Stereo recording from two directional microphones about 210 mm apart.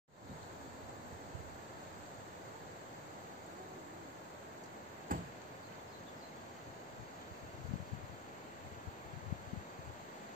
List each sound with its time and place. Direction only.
5.1 s chop: 40° right (ahead or behind)